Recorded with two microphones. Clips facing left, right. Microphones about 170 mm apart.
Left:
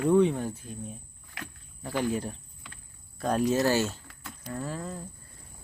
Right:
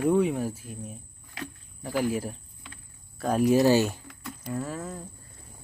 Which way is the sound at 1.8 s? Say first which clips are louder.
Right 2 dB; 5° right (ahead or behind).